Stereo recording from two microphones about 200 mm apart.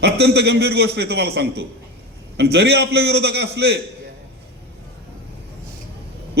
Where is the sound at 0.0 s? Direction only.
55° right (ahead or behind).